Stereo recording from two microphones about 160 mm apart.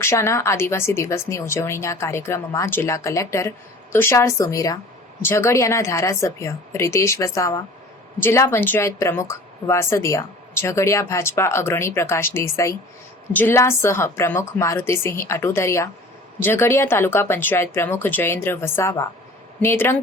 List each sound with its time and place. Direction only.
0.0 s a woman's voice: 15° left (ahead or behind)